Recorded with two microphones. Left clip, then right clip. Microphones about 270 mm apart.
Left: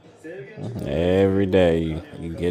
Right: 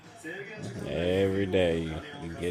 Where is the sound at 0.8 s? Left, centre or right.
Left.